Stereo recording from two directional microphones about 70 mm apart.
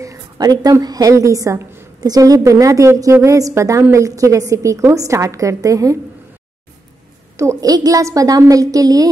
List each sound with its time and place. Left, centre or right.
0.4 s a woman's voice: right
1.1 s a woman's voice: right
1.6 s a sound: right
2.0 s a woman's voice: right
7.6 s a woman's voice: right